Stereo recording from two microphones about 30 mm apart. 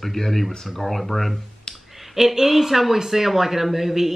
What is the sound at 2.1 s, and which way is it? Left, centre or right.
Speech, centre.